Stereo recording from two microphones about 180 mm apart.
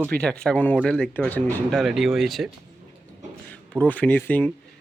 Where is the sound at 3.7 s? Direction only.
10° left (ahead or behind).